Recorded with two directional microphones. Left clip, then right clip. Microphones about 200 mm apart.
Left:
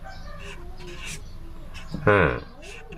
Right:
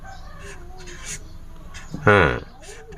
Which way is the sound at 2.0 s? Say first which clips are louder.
Right 4 dB; 40° right (ahead or behind).